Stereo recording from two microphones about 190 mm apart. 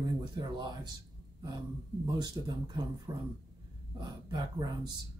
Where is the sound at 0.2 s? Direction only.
20° right (ahead or behind).